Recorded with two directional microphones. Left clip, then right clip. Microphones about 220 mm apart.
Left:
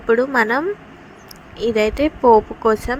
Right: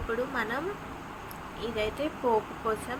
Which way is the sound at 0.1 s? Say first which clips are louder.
Left 16 dB; 40° left (ahead or behind).